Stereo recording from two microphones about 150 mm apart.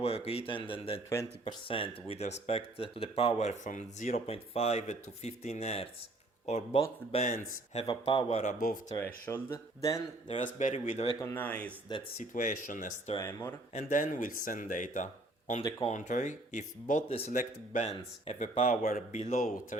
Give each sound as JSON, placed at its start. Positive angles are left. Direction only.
{"t": 0.0, "sound": "speech", "side_deg": 40}
{"t": 7.9, "sound": "speech", "side_deg": 35}
{"t": 8.4, "sound": "speech", "side_deg": 65}
{"t": 9.0, "sound": "speech", "side_deg": 15}
{"t": 10.2, "sound": "speech", "side_deg": 50}
{"t": 11.2, "sound": "speech", "side_deg": 20}
{"t": 11.4, "sound": "speech", "side_deg": 10}
{"t": 11.9, "sound": "speech", "side_deg": 30}
{"t": 12.2, "sound": "speech", "side_deg": 55}
{"t": 13.1, "sound": "speech", "side_deg": 20}
{"t": 13.7, "sound": "speech", "side_deg": 60}
{"t": 17.1, "sound": "speech", "side_deg": 40}
{"t": 17.3, "sound": "speech", "side_deg": 55}